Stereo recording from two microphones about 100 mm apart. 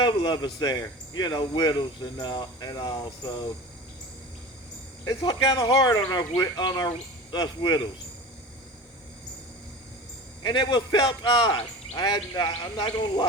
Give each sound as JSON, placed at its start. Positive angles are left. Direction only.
{"t": 0.0, "sound": "a man's voice", "side_deg": 50}
{"t": 5.0, "sound": "a man's voice", "side_deg": 45}
{"t": 10.4, "sound": "a man's voice", "side_deg": 50}
{"t": 12.5, "sound": "speech", "side_deg": 60}